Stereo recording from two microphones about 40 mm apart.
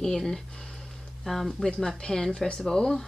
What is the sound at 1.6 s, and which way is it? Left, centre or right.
Speech, centre.